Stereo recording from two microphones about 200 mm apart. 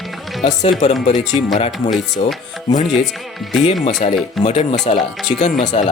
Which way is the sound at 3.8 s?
35° left (ahead or behind).